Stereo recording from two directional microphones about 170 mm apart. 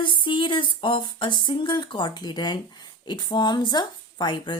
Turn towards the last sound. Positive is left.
turn(degrees=25)  # may be behind; listen again after turning